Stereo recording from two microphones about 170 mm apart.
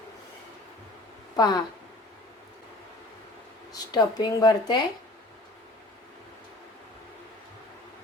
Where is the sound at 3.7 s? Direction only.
25° left (ahead or behind).